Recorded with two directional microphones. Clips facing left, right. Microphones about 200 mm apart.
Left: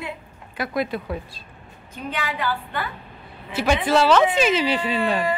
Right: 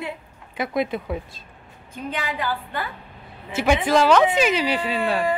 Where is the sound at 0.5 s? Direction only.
20° right (ahead or behind).